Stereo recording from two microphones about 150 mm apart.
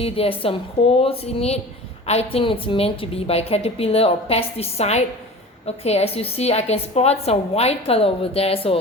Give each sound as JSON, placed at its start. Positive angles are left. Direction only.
{"t": 0.0, "sound": "a woman's voice", "side_deg": 40}